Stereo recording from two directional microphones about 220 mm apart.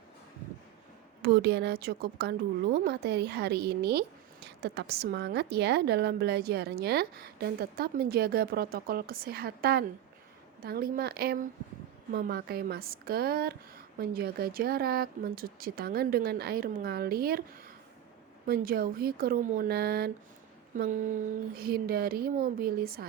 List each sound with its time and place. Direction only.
1.2 s speech: 45° right (ahead or behind)
18.4 s speech: 45° right (ahead or behind)